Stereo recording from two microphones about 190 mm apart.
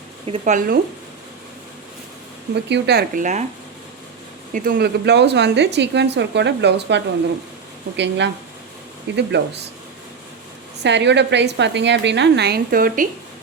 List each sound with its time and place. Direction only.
0.3 s speech: 40° right (ahead or behind)
2.6 s speech: 65° right (ahead or behind)
4.5 s speech: 55° right (ahead or behind)
10.8 s speech: 65° right (ahead or behind); by 13.1 s 50° right (ahead or behind)